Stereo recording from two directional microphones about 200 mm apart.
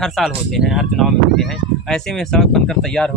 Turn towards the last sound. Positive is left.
turn(degrees=5)  # may be behind; listen again after turning